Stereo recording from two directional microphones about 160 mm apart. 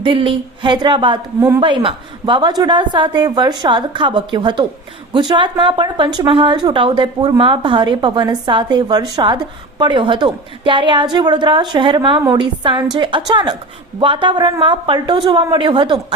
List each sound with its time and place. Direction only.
0.0 s speech: 35° right (ahead or behind)
1.4 s speech: 15° right (ahead or behind)
1.6 s a woman's voice: 30° right (ahead or behind)